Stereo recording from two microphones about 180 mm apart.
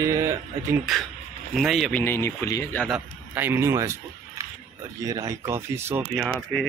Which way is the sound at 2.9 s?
10° right (ahead or behind).